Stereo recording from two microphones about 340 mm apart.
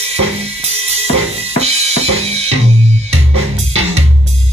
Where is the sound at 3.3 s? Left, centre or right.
Centre.